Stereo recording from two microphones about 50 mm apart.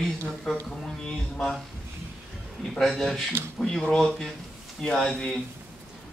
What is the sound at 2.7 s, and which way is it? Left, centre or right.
Speech, centre.